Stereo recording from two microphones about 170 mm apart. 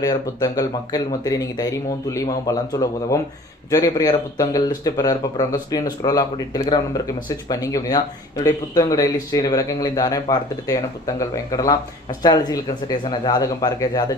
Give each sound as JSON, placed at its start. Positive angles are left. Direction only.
{"t": 0.0, "sound": "speech", "side_deg": 20}